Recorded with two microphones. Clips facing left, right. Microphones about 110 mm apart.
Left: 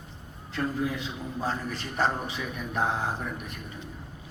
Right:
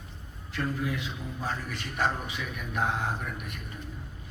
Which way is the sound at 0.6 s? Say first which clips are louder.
Left 2 dB; 30° left (ahead or behind).